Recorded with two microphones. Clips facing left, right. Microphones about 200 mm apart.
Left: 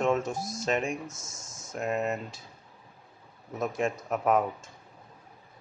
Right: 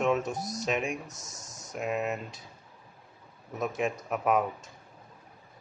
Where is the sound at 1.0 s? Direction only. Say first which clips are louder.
Left 3 dB; 20° right (ahead or behind).